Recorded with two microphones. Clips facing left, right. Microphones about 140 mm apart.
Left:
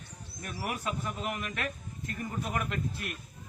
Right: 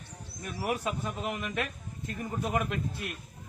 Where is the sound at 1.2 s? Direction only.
15° right (ahead or behind).